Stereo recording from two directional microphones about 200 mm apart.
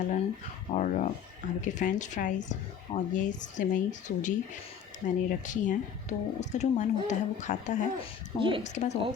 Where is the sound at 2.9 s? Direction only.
25° left (ahead or behind).